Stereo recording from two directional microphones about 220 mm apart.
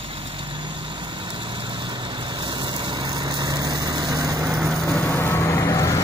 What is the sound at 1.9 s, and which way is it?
Vehicle, 20° right (ahead or behind).